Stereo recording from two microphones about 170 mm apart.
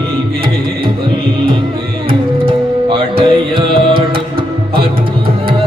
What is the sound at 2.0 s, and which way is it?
Music, 30° right (ahead or behind).